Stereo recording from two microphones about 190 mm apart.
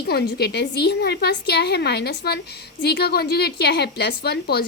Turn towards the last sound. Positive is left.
turn(degrees=55)  # may be behind; listen again after turning